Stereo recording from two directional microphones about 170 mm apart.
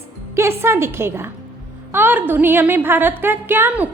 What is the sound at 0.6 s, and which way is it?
A woman's voice, 15° right (ahead or behind).